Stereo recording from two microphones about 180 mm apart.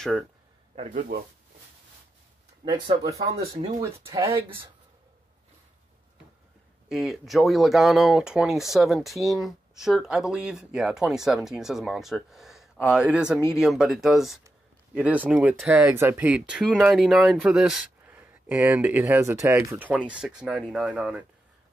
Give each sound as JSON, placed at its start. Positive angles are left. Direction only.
{"t": 0.9, "sound": "speech", "side_deg": -55}
{"t": 2.6, "sound": "speech", "side_deg": -25}
{"t": 6.9, "sound": "speech", "side_deg": 0}